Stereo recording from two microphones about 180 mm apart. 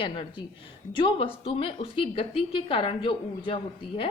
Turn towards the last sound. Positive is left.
turn(degrees=30)  # may be behind; listen again after turning